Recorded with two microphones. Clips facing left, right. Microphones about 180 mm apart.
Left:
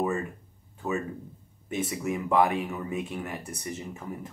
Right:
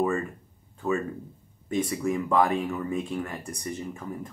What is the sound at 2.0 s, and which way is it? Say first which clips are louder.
Speech: even; 10° left (ahead or behind).